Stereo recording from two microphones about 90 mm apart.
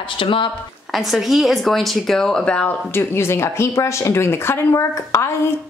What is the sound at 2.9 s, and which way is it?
Speech, 25° left (ahead or behind).